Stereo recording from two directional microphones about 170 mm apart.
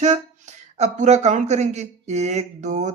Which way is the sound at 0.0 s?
45° right (ahead or behind).